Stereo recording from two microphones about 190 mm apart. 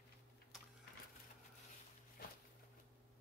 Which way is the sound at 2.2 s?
50° left (ahead or behind).